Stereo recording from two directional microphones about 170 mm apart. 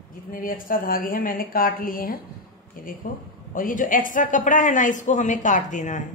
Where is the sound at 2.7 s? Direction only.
55° left (ahead or behind).